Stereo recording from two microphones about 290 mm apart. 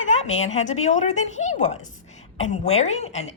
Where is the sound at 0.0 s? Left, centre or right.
Left.